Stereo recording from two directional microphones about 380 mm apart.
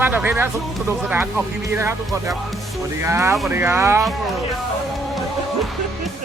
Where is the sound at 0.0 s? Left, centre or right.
Centre.